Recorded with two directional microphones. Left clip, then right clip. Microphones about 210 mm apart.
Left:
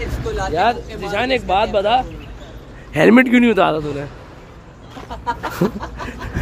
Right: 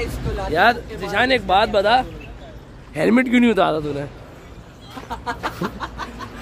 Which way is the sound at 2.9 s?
15° left (ahead or behind).